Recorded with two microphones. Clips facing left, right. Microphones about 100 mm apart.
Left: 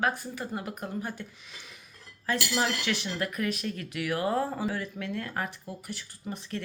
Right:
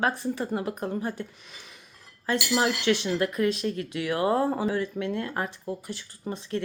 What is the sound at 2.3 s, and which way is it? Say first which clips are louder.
Speech: right 4 dB; 25° right (ahead or behind).